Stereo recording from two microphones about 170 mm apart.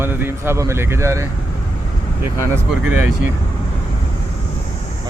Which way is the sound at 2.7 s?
10° right (ahead or behind).